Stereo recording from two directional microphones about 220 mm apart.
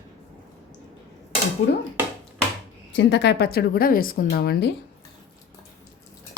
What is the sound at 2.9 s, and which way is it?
A woman's voice, 50° left (ahead or behind).